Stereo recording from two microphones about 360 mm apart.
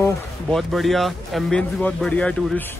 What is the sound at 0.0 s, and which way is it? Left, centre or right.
Speech, centre.